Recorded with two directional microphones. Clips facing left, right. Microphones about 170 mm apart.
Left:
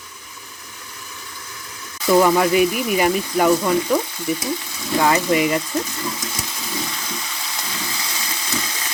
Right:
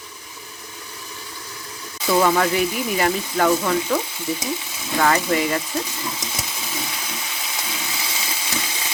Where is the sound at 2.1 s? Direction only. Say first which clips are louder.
Left 3 dB; 15° left (ahead or behind).